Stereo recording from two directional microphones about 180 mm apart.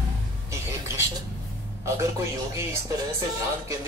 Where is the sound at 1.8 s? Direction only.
15° right (ahead or behind).